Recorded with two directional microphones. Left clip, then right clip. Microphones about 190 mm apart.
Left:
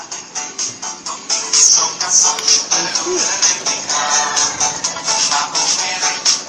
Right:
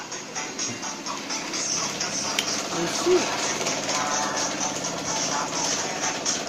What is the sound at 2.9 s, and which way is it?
Music, 30° left (ahead or behind).